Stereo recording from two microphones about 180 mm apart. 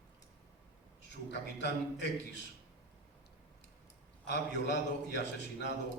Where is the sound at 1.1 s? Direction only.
70° left (ahead or behind).